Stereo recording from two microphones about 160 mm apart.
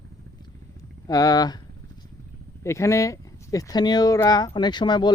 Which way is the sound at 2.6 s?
15° left (ahead or behind).